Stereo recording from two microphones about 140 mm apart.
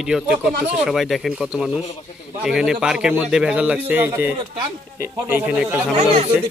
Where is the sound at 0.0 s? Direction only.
5° right (ahead or behind).